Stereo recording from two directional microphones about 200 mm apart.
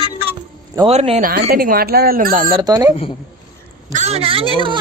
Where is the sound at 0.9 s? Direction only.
35° right (ahead or behind).